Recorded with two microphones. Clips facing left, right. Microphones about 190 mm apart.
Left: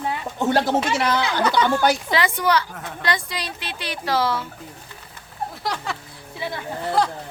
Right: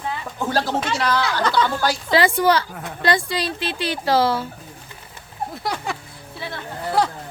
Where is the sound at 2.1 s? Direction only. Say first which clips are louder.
Right 4 dB; 30° right (ahead or behind).